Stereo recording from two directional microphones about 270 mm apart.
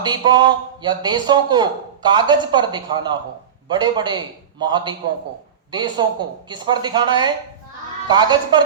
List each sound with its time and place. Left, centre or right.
0.0 s a man's voice: centre